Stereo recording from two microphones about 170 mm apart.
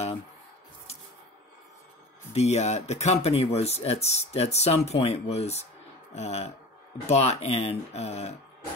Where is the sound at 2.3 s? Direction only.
40° left (ahead or behind).